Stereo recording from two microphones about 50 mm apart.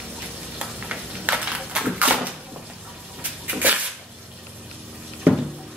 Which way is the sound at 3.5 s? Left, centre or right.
Right.